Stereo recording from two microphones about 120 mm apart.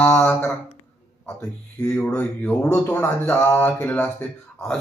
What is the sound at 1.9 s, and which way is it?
A man's voice, 15° left (ahead or behind).